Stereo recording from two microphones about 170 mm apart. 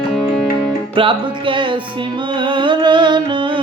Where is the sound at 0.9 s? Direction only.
30° right (ahead or behind).